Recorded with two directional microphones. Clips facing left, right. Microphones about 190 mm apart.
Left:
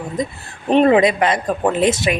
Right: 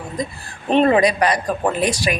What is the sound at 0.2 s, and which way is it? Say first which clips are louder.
A woman's voice: left 3 dB; 20° left (ahead or behind).